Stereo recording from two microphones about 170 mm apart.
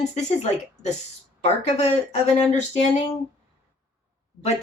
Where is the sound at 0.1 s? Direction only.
45° left (ahead or behind).